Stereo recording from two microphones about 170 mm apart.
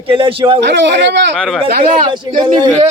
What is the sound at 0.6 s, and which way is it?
Speech, 90° right.